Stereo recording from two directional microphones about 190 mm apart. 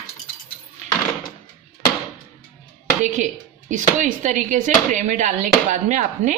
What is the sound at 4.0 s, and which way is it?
Speech, 40° right (ahead or behind).